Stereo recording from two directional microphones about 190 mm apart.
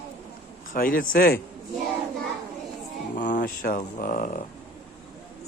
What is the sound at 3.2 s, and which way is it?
Speech, 40° left (ahead or behind).